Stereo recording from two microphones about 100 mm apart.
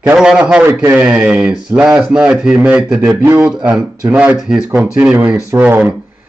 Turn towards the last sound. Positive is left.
turn(degrees=-20)  # may be behind; listen again after turning